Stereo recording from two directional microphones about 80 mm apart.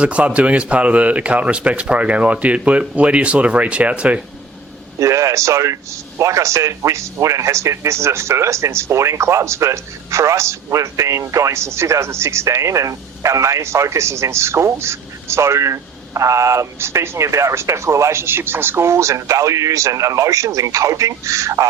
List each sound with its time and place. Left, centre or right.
0.0 s a man's voice: centre
4.9 s a man's voice: right